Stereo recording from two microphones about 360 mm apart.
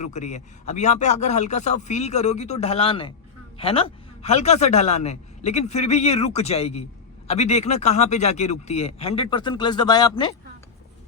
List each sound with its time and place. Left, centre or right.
0.0 s a man's voice: centre